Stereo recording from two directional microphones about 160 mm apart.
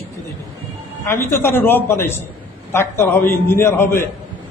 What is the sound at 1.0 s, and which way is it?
A man's voice, 15° left (ahead or behind).